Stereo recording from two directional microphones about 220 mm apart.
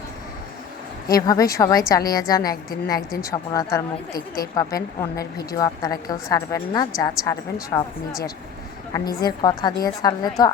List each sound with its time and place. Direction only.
1.0 s a woman's voice: 15° left (ahead or behind)
8.9 s a woman's voice: 20° left (ahead or behind)